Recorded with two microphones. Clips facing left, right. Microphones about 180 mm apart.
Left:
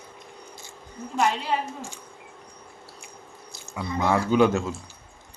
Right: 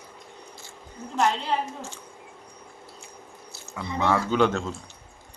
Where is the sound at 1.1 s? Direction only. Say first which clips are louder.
Even; 10° left (ahead or behind).